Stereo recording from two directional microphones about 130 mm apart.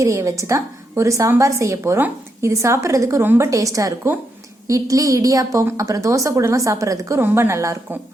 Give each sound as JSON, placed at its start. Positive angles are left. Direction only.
{"t": 0.0, "sound": "a woman's voice", "side_deg": -25}